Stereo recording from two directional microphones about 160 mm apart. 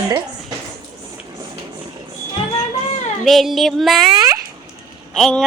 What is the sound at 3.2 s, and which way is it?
Speech, centre (ahead or behind).